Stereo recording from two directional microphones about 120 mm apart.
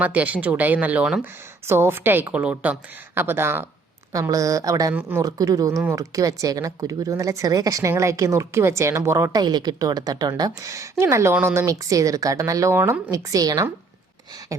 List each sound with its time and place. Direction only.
0.0 s a woman's voice: 10° right (ahead or behind)
1.2 s a woman's voice: 20° right (ahead or behind)
4.9 s a woman's voice: 15° right (ahead or behind)
5.2 s speech: 30° right (ahead or behind)